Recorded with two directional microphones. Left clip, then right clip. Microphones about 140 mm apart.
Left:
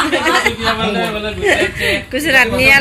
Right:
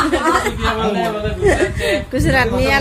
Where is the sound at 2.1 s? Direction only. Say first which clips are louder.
Left 7 dB; 30° right (ahead or behind).